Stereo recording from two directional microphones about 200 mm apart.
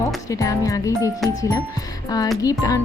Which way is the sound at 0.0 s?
15° left (ahead or behind).